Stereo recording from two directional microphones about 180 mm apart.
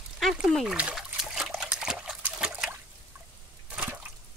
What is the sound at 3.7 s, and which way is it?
Liquid, 10° right (ahead or behind).